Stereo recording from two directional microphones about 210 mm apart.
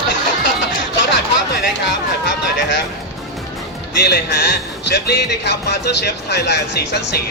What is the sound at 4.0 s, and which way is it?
Speech, 50° left (ahead or behind).